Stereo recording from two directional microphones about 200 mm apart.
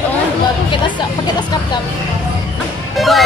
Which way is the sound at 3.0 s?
Centre (ahead or behind).